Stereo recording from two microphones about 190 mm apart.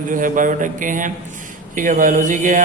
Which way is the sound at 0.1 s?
45° right (ahead or behind).